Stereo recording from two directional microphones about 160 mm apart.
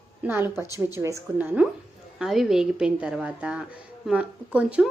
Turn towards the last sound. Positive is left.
turn(degrees=-10)  # may be behind; listen again after turning